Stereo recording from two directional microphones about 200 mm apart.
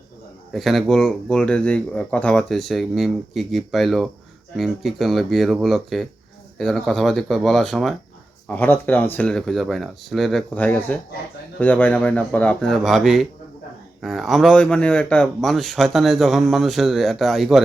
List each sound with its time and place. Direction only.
0.5 s speech: centre (ahead or behind)